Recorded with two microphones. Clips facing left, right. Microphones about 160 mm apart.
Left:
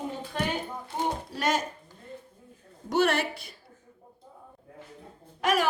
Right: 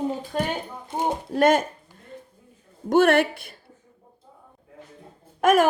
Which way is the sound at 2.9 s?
55° right (ahead or behind).